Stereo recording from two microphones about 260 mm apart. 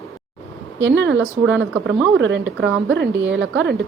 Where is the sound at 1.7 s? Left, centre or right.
Centre.